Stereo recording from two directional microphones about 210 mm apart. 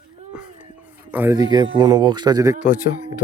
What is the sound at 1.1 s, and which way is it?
Speech, 10° right (ahead or behind).